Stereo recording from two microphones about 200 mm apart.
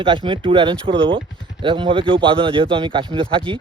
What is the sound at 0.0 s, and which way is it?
Speech, 25° right (ahead or behind).